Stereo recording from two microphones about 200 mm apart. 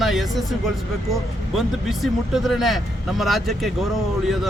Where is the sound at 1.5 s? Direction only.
Centre (ahead or behind).